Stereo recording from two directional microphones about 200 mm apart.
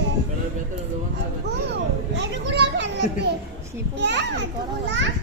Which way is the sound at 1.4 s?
60° right (ahead or behind).